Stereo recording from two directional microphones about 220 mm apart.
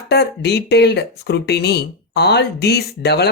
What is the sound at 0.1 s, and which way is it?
Speech, 50° left (ahead or behind).